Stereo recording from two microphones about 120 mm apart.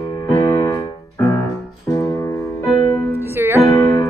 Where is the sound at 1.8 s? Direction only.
25° left (ahead or behind).